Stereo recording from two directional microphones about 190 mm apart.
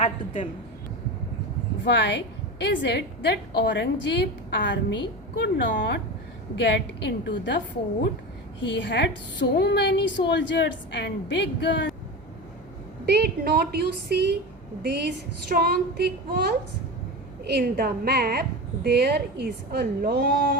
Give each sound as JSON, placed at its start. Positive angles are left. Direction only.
{"t": 1.8, "sound": "a woman's voice", "side_deg": 65}
{"t": 8.6, "sound": "a woman's voice", "side_deg": 70}
{"t": 13.1, "sound": "a woman's voice", "side_deg": -60}